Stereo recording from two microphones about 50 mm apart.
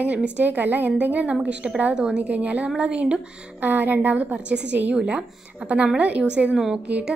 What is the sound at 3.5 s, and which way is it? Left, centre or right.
A woman's voice, right.